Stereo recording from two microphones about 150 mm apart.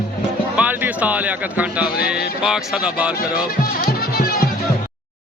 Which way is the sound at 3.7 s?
85° left.